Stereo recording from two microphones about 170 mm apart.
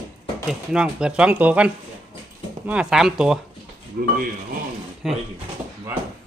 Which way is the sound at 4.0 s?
55° right (ahead or behind).